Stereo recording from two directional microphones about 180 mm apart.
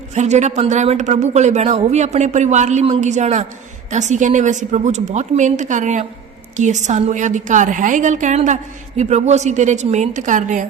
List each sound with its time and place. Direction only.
0.1 s a woman's voice: 40° right (ahead or behind)